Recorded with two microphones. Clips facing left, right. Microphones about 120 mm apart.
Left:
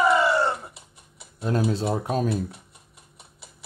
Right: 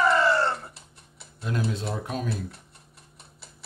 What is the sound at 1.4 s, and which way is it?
Speech, 35° left (ahead or behind).